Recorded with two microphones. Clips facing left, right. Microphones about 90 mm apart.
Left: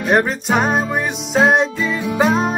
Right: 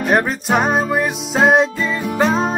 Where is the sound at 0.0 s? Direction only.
Centre (ahead or behind).